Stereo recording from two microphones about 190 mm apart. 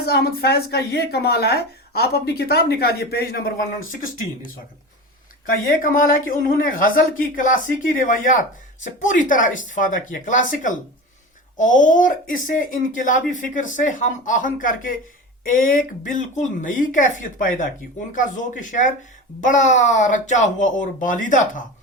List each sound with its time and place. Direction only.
0.0 s a woman's voice: 60° left (ahead or behind)
4.0 s speech: 45° left (ahead or behind)
5.6 s speech: 45° left (ahead or behind)
18.6 s speech: 40° left (ahead or behind)